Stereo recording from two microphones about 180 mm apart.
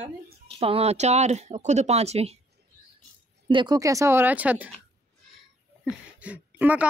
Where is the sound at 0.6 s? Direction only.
35° right (ahead or behind).